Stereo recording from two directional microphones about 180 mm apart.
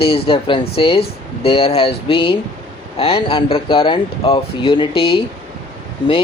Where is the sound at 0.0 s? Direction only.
30° left (ahead or behind).